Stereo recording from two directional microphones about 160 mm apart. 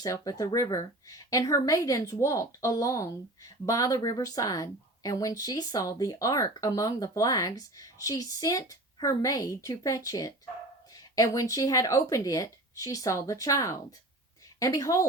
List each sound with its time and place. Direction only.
0.0 s speech: 20° left (ahead or behind)